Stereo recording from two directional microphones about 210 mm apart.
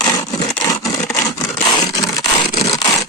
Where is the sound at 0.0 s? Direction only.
20° left (ahead or behind).